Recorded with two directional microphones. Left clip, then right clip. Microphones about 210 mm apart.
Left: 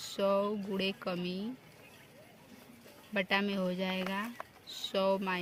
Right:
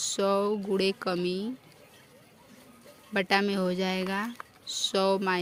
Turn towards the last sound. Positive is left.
turn(degrees=-50)  # may be behind; listen again after turning